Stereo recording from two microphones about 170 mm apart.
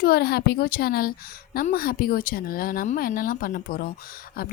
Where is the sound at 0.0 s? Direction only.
65° left (ahead or behind).